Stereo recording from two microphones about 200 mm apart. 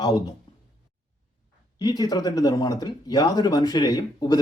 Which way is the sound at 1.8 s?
20° left (ahead or behind).